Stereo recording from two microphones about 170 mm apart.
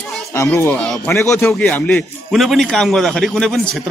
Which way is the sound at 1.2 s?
15° left (ahead or behind).